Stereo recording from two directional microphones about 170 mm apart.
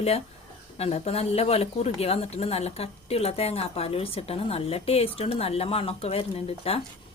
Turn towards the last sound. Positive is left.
turn(degrees=35)  # may be behind; listen again after turning